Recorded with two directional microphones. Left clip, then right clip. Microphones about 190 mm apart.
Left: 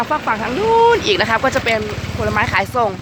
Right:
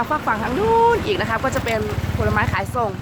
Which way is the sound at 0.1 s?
20° left (ahead or behind).